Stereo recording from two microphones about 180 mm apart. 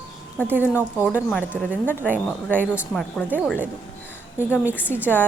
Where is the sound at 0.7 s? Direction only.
10° right (ahead or behind).